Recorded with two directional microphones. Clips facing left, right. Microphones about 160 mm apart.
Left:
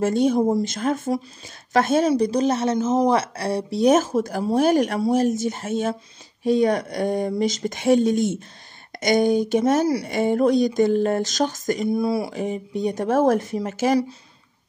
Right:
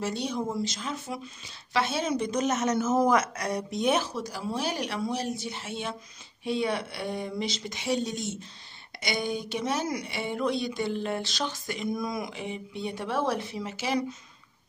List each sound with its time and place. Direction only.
0.0 s speech: 50° left (ahead or behind)
0.4 s speech: 35° left (ahead or behind)
0.7 s speech: 50° left (ahead or behind)
2.0 s speech: 35° left (ahead or behind)
11.9 s speech: 30° left (ahead or behind); by 13.9 s 45° left (ahead or behind)